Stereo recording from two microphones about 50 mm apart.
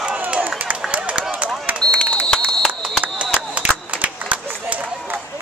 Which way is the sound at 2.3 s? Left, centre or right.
Centre.